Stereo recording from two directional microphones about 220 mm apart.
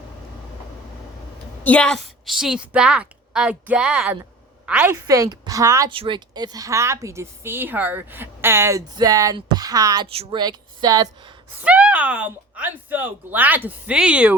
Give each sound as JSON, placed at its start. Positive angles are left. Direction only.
{"t": 1.6, "sound": "a woman's voice", "side_deg": 5}
{"t": 11.6, "sound": "speech", "side_deg": -5}